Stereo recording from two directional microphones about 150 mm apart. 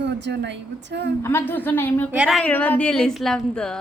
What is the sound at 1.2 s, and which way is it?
Speech, 15° left (ahead or behind).